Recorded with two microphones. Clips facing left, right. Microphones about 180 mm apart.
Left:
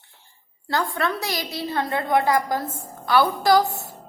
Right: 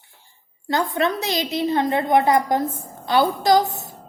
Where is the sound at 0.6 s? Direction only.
20° right (ahead or behind).